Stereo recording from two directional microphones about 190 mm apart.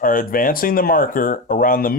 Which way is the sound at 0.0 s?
45° left (ahead or behind).